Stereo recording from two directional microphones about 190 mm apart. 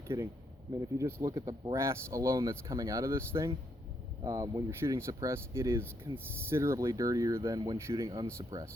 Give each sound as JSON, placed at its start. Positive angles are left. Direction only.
{"t": 0.1, "sound": "speech", "side_deg": -15}